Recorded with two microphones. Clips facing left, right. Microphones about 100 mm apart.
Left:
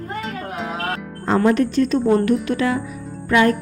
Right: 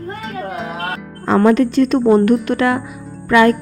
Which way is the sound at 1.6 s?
90° right.